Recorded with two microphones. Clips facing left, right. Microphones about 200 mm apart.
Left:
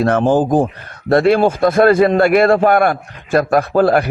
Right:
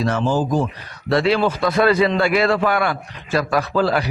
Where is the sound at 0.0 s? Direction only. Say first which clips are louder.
Left 6 dB; 55° left (ahead or behind).